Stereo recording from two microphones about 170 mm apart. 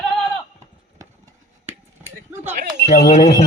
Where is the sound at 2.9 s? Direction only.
55° left (ahead or behind).